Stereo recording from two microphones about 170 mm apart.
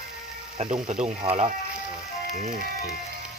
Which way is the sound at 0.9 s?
40° right (ahead or behind).